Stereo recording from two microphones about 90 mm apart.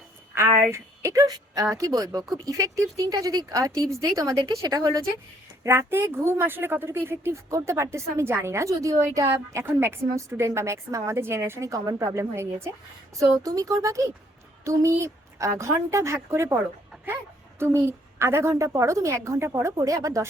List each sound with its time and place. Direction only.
0.3 s a woman's voice: 30° right (ahead or behind)
5.6 s a woman's voice: 30° right (ahead or behind)
11.7 s speech: 40° right (ahead or behind)
12.2 s a woman's voice: 30° right (ahead or behind)
13.1 s speech: 40° right (ahead or behind)
17.6 s speech: 30° right (ahead or behind)